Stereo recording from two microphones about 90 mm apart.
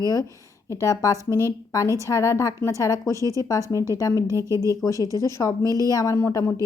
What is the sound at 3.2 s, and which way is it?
Speech, 40° right (ahead or behind).